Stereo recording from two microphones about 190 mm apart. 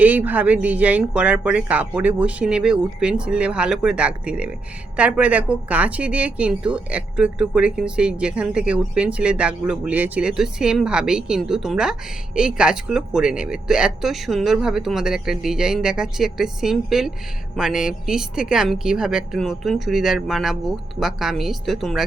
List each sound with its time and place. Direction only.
0.0 s a woman's voice: 10° right (ahead or behind)